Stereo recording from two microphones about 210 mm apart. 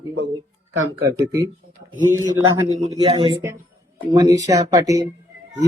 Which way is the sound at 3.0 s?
25° right (ahead or behind).